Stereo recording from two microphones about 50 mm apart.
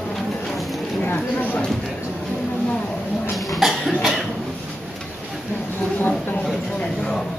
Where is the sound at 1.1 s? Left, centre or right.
Left.